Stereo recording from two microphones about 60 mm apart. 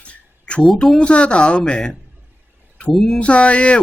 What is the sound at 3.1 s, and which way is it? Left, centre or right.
Speech, centre.